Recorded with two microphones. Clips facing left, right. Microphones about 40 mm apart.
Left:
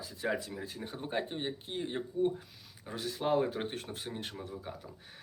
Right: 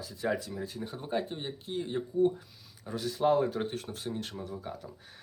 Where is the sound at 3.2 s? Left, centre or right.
Centre.